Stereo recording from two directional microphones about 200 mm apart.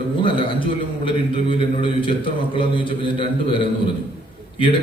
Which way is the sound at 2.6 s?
25° left (ahead or behind).